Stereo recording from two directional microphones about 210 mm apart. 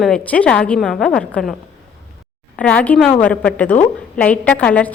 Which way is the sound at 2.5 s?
5° left (ahead or behind).